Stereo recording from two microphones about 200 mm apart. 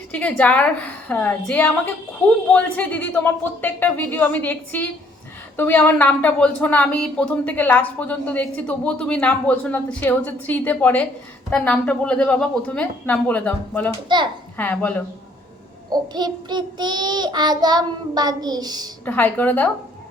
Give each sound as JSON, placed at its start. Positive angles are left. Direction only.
{"t": 0.1, "sound": "speech", "side_deg": 5}
{"t": 15.9, "sound": "child singing", "side_deg": -20}
{"t": 19.0, "sound": "speech", "side_deg": 10}